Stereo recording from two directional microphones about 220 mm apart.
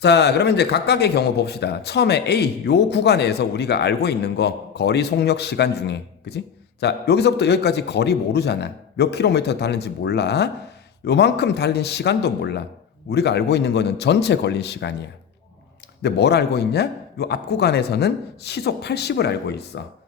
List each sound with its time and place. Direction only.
0.0 s speech: 50° left (ahead or behind)
16.0 s speech: 50° left (ahead or behind)